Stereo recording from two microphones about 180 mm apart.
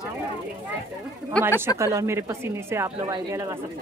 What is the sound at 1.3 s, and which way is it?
Speech, 5° left (ahead or behind).